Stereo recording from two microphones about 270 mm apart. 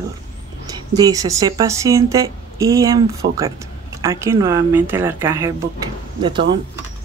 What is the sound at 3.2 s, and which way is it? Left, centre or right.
Speech, right.